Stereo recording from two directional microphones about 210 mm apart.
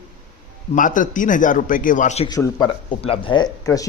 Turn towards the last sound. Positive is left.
turn(degrees=15)  # may be behind; listen again after turning